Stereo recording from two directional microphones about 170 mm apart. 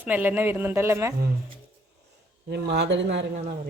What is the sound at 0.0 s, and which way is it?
Speech, 10° right (ahead or behind).